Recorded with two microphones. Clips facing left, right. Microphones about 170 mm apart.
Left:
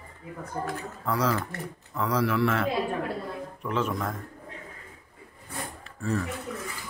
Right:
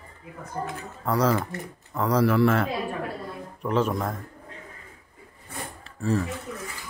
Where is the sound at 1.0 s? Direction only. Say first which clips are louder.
Right 4 dB; 45° right (ahead or behind).